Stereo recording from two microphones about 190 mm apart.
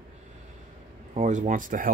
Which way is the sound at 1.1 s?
40° right (ahead or behind).